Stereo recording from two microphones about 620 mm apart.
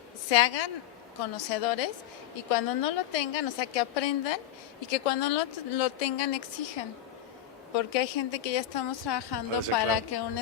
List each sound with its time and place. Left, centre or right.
0.3 s a woman's voice: left